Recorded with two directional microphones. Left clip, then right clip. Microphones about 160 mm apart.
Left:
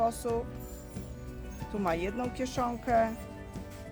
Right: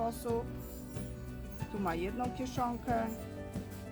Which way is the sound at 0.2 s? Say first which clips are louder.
Left 3 dB; 60° left (ahead or behind).